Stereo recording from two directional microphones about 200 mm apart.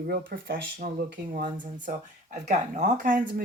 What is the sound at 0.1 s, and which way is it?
Speech, 45° right (ahead or behind).